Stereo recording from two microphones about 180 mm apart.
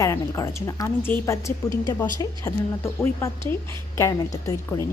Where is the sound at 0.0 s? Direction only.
15° left (ahead or behind).